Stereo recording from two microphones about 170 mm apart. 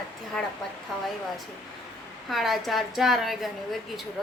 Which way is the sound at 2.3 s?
Centre (ahead or behind).